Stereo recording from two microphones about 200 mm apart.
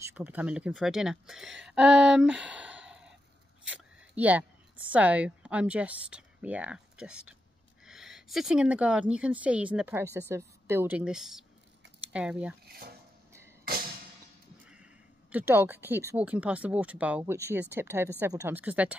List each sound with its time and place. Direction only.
0.0 s a woman's voice: 10° right (ahead or behind)
12.6 s speech: 50° right (ahead or behind)
14.7 s speech: 5° right (ahead or behind)